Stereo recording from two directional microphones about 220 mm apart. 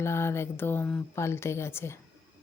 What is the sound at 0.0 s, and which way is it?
Speech, 10° left (ahead or behind).